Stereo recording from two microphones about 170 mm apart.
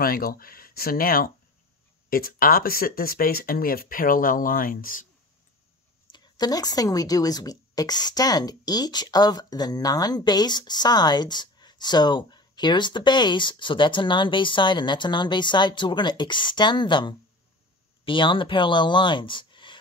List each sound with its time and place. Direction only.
0.0 s speech: 60° left (ahead or behind)
6.1 s a woman's voice: 25° left (ahead or behind)